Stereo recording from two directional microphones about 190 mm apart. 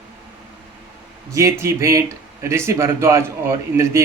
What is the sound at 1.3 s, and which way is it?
A man's voice, 15° right (ahead or behind).